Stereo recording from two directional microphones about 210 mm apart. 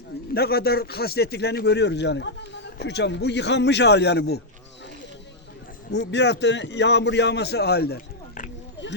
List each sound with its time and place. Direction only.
0.3 s speech: 50° left (ahead or behind)
5.9 s a man's voice: 55° left (ahead or behind)